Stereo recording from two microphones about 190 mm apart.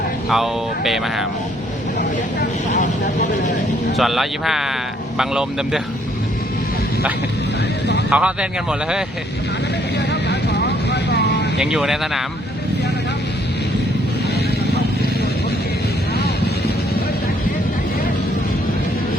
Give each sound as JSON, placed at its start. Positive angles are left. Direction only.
{"t": 0.3, "sound": "speech", "side_deg": 0}
{"t": 2.7, "sound": "speech", "side_deg": 40}
{"t": 3.9, "sound": "speech", "side_deg": 0}
{"t": 8.1, "sound": "speech", "side_deg": -5}
{"t": 10.1, "sound": "vehicle", "side_deg": 60}
{"t": 11.5, "sound": "speech", "side_deg": -5}